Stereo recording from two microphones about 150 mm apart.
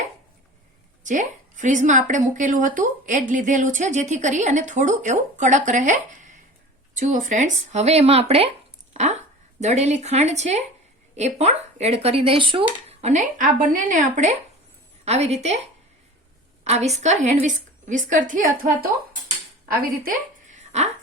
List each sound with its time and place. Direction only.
1.0 s speech: 55° right (ahead or behind)
8.9 s a sound: 50° right (ahead or behind)
9.6 s speech: 50° right (ahead or behind)
12.9 s speech: 50° right (ahead or behind)
16.6 s speech: 45° right (ahead or behind); by 18.9 s 70° right (ahead or behind)
20.5 s a sound: 50° right (ahead or behind)